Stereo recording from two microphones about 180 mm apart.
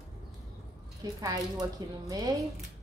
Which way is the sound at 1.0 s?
20° right (ahead or behind).